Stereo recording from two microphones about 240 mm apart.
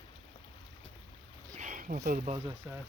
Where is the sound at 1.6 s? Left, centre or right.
Right.